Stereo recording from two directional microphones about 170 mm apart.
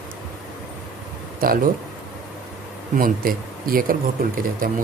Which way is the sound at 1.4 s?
55° right (ahead or behind).